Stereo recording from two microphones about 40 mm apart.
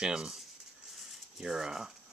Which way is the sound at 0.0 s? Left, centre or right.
Centre.